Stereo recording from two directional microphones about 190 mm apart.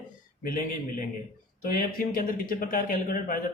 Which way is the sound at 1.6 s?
50° left (ahead or behind).